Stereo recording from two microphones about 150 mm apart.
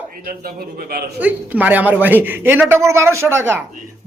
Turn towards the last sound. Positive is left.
turn(degrees=-15)  # may be behind; listen again after turning